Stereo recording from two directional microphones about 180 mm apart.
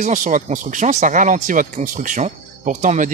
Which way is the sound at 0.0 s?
45° right (ahead or behind).